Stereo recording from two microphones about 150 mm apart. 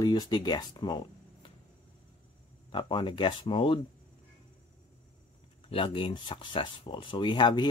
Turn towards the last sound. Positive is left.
turn(degrees=30)  # may be behind; listen again after turning